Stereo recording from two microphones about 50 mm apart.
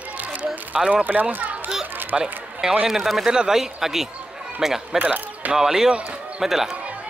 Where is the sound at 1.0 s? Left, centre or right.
Right.